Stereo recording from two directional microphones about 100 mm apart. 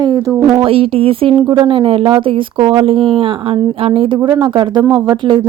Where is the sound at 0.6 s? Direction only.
75° right (ahead or behind); by 5.4 s 50° right (ahead or behind).